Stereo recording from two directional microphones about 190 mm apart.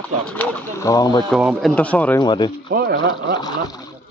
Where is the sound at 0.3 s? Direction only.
10° left (ahead or behind).